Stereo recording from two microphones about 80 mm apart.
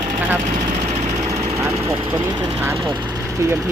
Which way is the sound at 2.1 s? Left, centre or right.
Right.